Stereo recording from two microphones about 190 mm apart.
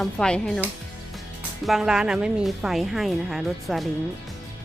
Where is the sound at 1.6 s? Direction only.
Centre (ahead or behind).